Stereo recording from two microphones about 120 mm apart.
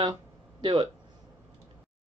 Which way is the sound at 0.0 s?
40° right (ahead or behind).